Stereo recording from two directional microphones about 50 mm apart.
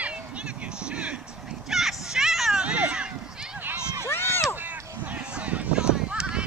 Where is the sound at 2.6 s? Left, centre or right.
Right.